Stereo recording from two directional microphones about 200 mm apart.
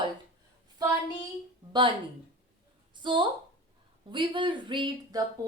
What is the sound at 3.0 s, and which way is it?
Speech, 25° right (ahead or behind).